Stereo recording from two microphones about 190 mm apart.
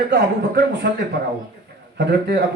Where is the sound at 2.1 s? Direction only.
60° right (ahead or behind).